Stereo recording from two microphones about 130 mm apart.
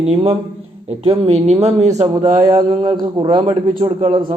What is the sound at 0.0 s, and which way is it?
A man's voice, 45° right (ahead or behind).